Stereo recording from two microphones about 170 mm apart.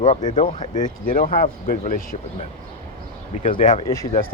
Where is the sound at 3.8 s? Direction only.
20° left (ahead or behind).